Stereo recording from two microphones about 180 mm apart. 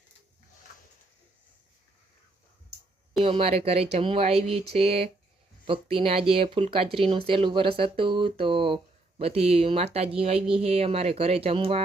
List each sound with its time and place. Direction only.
3.2 s speech: 30° right (ahead or behind)